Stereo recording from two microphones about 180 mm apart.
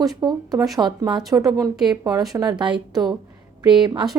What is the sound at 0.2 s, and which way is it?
Speech, 20° right (ahead or behind).